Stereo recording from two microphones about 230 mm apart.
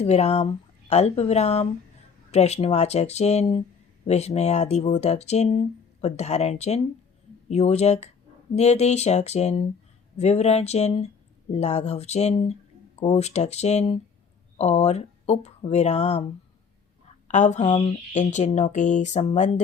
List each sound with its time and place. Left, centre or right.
0.0 s speech: left
17.2 s speech: left